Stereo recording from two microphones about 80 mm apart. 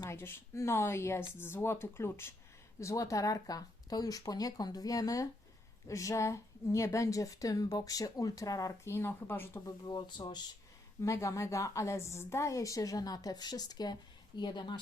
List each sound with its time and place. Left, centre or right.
0.1 s speech: left
2.8 s a woman's voice: left
8.8 s speech: left
9.8 s speech: left
11.0 s a woman's voice: left
14.3 s speech: left